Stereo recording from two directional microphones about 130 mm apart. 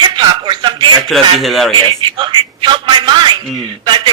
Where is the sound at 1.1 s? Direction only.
Centre (ahead or behind).